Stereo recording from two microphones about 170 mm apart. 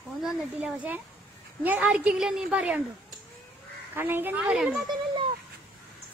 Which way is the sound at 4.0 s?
10° right (ahead or behind).